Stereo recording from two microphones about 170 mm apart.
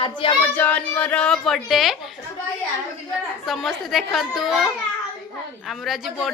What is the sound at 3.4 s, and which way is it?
A woman's voice, centre (ahead or behind).